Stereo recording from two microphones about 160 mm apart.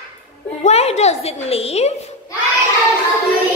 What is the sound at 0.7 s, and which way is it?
A woman's voice, 40° left (ahead or behind).